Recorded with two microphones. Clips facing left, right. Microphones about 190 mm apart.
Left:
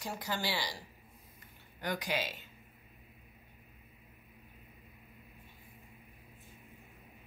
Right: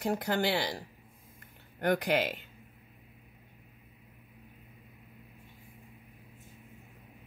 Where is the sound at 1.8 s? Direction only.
60° right (ahead or behind).